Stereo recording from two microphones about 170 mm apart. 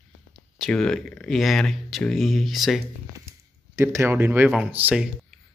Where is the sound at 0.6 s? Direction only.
Centre (ahead or behind).